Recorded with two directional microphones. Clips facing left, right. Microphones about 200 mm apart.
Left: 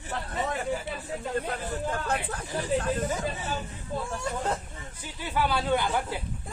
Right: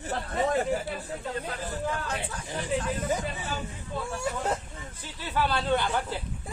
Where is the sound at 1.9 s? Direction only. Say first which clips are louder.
Left 2 dB; 55° left (ahead or behind).